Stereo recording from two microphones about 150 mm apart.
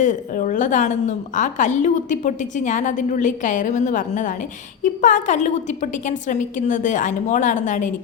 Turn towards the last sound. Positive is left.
turn(degrees=55)  # may be behind; listen again after turning